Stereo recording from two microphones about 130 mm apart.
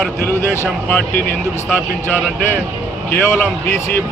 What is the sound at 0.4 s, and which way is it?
Speech, 20° left (ahead or behind).